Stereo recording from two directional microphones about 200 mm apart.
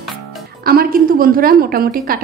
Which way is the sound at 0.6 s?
45° right (ahead or behind).